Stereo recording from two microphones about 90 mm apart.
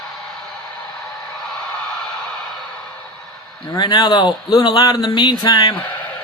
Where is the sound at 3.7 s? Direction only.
50° left (ahead or behind).